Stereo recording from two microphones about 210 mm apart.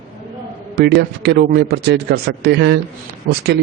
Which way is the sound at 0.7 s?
50° right (ahead or behind).